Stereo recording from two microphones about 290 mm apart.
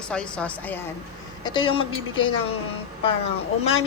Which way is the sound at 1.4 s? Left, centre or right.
Centre.